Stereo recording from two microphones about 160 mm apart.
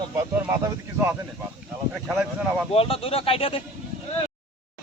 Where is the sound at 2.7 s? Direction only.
35° left (ahead or behind).